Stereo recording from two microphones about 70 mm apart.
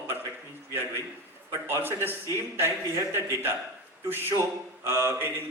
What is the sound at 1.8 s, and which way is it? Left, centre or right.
A man's voice, right.